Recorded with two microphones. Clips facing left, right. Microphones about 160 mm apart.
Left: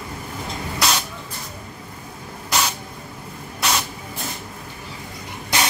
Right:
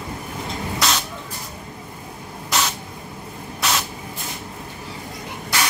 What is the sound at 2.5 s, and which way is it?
Spray, centre (ahead or behind).